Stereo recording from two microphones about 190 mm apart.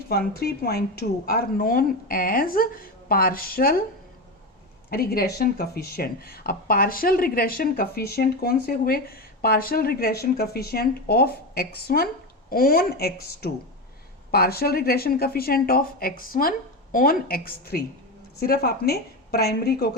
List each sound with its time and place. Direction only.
0.1 s speech: 55° left (ahead or behind)
4.9 s a woman's voice: 55° left (ahead or behind)